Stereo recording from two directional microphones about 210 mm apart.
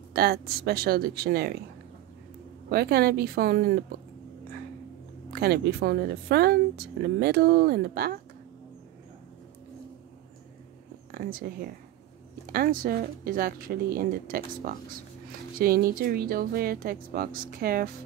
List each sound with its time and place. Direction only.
0.1 s speech: 50° right (ahead or behind)
2.7 s speech: 50° right (ahead or behind)
5.3 s speech: 50° right (ahead or behind)
11.1 s speech: 45° right (ahead or behind)